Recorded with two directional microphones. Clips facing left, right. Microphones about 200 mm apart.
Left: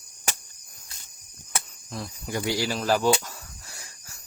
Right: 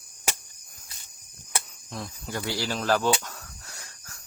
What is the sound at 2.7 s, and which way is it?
Cricket, 10° left (ahead or behind).